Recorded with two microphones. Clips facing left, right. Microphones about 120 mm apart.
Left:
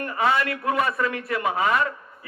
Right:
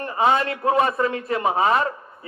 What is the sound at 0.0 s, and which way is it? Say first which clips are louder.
A man's voice: right 3 dB; 25° right (ahead or behind).